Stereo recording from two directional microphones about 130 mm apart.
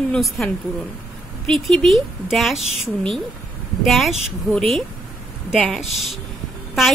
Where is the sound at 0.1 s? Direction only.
Centre (ahead or behind).